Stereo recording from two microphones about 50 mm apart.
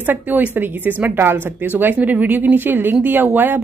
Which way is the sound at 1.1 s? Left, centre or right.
Right.